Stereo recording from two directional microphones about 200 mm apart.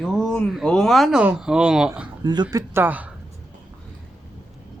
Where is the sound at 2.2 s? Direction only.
20° right (ahead or behind).